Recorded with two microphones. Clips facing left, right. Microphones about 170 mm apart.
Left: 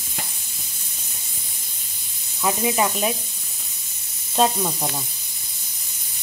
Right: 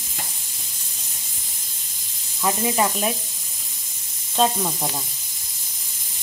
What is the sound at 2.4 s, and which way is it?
Speech, 5° left (ahead or behind).